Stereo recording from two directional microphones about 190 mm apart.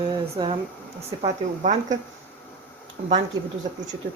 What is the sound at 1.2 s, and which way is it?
Speech, 40° right (ahead or behind).